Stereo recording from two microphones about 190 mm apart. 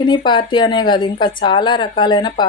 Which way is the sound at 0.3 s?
25° left (ahead or behind).